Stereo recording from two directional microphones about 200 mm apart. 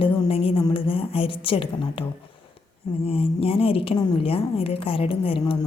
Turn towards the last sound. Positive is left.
turn(degrees=25)  # may be behind; listen again after turning